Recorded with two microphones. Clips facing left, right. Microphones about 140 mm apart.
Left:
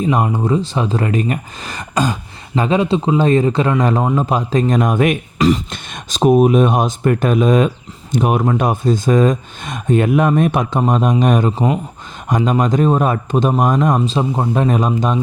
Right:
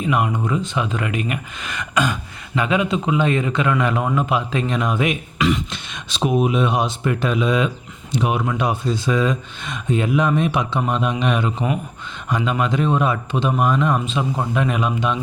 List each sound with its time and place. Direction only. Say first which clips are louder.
0.0 s speech: left 4 dB; 35° left (ahead or behind)